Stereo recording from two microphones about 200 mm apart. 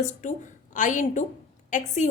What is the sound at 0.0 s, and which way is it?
A woman's voice, 40° left (ahead or behind).